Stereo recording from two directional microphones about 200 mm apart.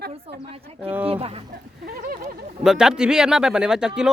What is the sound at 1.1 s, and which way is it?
Speech, 30° right (ahead or behind).